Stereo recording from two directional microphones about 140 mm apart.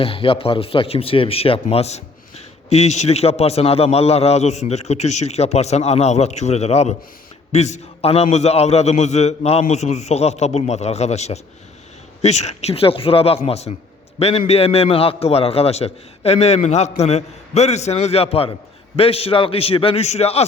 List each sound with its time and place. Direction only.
0.0 s a man's voice: 40° left (ahead or behind)